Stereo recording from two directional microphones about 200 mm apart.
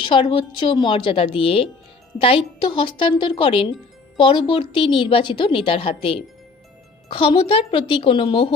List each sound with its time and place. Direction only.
0.0 s a woman's voice: 25° left (ahead or behind)